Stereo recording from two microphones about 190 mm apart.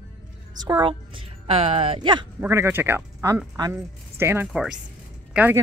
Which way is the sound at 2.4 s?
10° right (ahead or behind).